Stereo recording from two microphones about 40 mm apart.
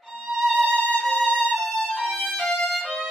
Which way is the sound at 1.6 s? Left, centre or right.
Left.